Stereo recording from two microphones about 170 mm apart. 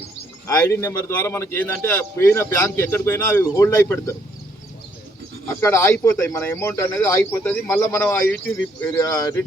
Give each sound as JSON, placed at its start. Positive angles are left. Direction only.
{"t": 0.4, "sound": "a man's voice", "side_deg": 15}
{"t": 5.5, "sound": "a man's voice", "side_deg": 15}